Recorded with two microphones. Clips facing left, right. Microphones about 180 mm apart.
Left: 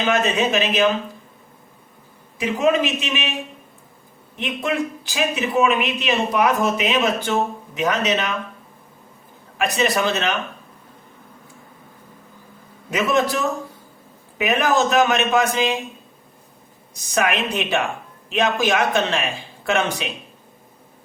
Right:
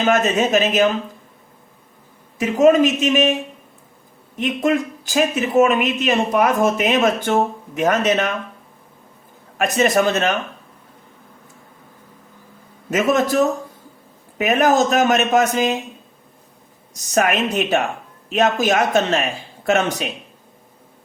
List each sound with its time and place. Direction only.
0.0 s speech: 45° right (ahead or behind)
2.4 s speech: 45° right (ahead or behind)
4.4 s speech: 45° right (ahead or behind)
9.6 s speech: 45° right (ahead or behind)
12.9 s speech: 45° right (ahead or behind)
16.9 s speech: 45° right (ahead or behind)